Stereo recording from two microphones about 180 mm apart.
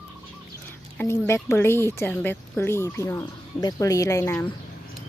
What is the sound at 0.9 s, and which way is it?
Speech, 15° left (ahead or behind).